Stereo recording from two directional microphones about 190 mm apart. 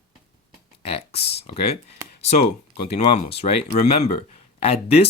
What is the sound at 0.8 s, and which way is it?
Speech, 30° left (ahead or behind).